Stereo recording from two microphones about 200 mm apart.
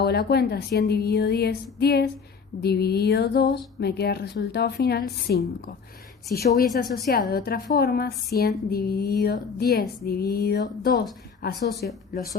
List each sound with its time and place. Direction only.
0.0 s a woman's voice: 50° left (ahead or behind)
2.6 s a sound: 55° left (ahead or behind)
3.8 s a woman's voice: 55° left (ahead or behind)